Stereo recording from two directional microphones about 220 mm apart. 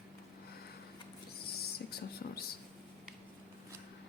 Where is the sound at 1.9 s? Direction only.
45° left (ahead or behind).